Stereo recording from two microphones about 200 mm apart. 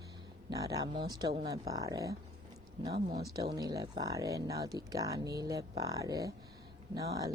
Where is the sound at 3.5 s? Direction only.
20° right (ahead or behind).